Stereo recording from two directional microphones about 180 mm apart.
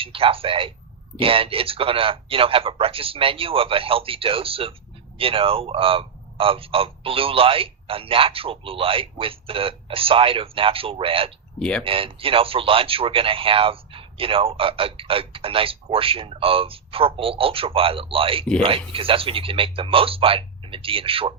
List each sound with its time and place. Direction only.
0.0 s speech: 30° right (ahead or behind)
11.6 s speech: 5° left (ahead or behind)
11.9 s speech: 30° right (ahead or behind)